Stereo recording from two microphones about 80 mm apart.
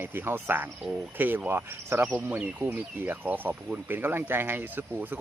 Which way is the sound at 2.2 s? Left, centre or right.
Centre.